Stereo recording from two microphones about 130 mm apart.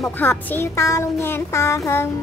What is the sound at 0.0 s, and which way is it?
Speech, 10° left (ahead or behind).